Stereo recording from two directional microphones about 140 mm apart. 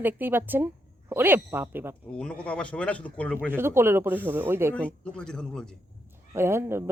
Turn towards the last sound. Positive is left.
turn(degrees=-20)  # may be behind; listen again after turning